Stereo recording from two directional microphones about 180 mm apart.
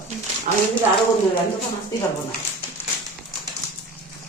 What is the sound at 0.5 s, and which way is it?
Speech, 50° right (ahead or behind).